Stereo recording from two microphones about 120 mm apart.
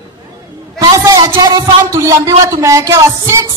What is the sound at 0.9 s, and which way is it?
A man's voice, 30° right (ahead or behind).